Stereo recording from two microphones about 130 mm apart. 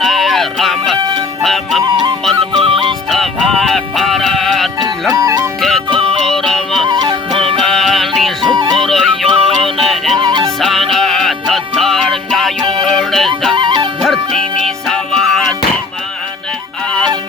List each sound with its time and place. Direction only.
0.0 s music: centre (ahead or behind)
2.6 s music: 40° right (ahead or behind)
3.1 s music: centre (ahead or behind)
5.1 s music: 30° right (ahead or behind)
5.5 s music: centre (ahead or behind)
6.8 s music: 35° right (ahead or behind)
7.4 s music: 5° left (ahead or behind)
8.4 s music: 35° right (ahead or behind)
8.7 s music: centre (ahead or behind)
10.2 s music: 35° right (ahead or behind)
10.6 s music: centre (ahead or behind)
13.6 s music: 35° right (ahead or behind)
14.0 s music: centre (ahead or behind)